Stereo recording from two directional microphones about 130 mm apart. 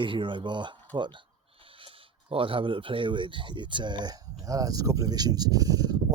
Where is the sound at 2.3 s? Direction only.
45° right (ahead or behind).